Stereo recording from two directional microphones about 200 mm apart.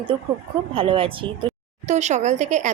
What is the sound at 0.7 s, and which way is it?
A woman's voice, 25° right (ahead or behind).